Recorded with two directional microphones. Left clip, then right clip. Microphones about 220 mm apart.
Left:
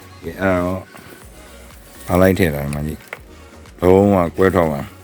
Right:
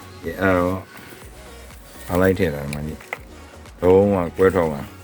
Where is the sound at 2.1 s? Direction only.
40° left (ahead or behind).